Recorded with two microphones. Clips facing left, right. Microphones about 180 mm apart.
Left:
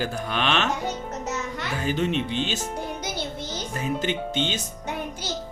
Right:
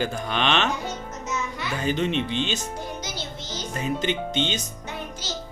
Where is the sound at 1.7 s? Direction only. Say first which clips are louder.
Right 1 dB; 5° left (ahead or behind).